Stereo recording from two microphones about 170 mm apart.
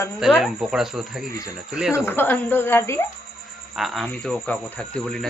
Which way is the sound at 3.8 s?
Centre (ahead or behind).